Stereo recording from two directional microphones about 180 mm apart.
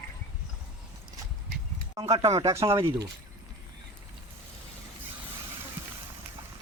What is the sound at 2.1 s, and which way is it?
Speech, 30° right (ahead or behind).